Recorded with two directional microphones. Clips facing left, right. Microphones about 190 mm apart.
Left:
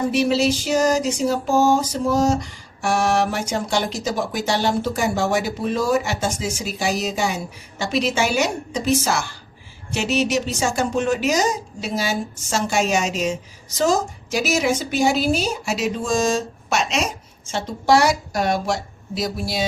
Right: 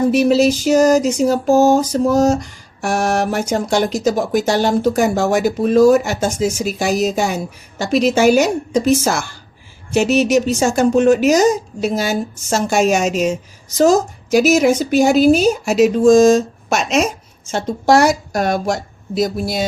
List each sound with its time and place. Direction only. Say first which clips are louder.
0.1 s speech: right 6 dB; 45° right (ahead or behind)